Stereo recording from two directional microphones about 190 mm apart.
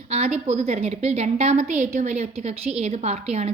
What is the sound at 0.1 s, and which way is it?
A woman's voice, 35° right (ahead or behind).